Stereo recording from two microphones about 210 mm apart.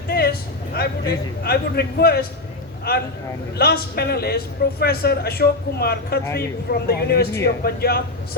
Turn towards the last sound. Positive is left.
turn(degrees=50)  # may be behind; listen again after turning